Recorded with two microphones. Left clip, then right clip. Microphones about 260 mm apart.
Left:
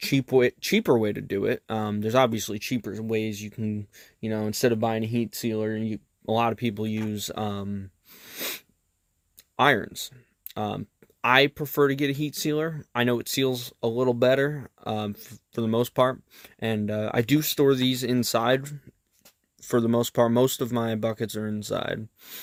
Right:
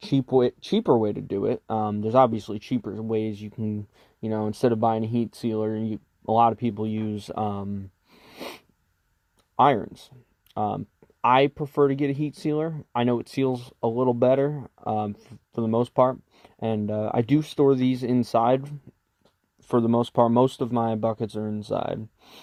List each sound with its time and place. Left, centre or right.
0.1 s speech: left
8.2 s sneeze: left
9.6 s speech: left
19.8 s speech: left